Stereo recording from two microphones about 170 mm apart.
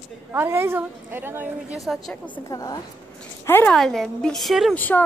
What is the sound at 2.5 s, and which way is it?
A woman's voice, 20° left (ahead or behind).